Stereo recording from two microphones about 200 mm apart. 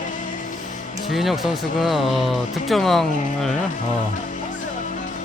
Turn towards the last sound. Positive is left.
turn(degrees=0)  # may be behind; listen again after turning